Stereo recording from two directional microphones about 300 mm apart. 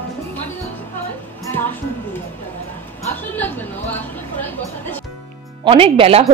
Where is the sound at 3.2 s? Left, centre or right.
Centre.